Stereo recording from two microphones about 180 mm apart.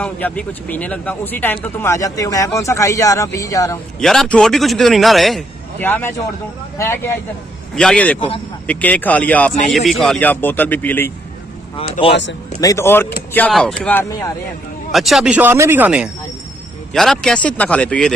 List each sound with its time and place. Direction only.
0.0 s speech: 10° left (ahead or behind)
4.0 s a man's voice: centre (ahead or behind)
5.8 s a man's voice: 10° left (ahead or behind)
11.7 s speech: 30° left (ahead or behind)
12.5 s speech: 15° left (ahead or behind)
13.5 s a man's voice: centre (ahead or behind)
13.8 s speech: 15° left (ahead or behind)
14.9 s speech: centre (ahead or behind)
16.9 s a man's voice: centre (ahead or behind)